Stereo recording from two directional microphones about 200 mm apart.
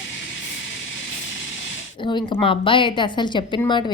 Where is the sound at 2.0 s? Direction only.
25° left (ahead or behind).